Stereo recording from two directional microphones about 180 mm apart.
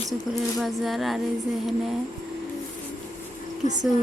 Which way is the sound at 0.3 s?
Centre (ahead or behind).